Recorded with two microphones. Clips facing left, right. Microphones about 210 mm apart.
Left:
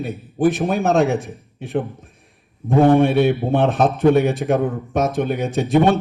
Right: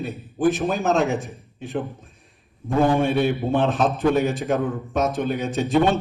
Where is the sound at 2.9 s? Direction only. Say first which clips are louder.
Left 6 dB; 60° left (ahead or behind).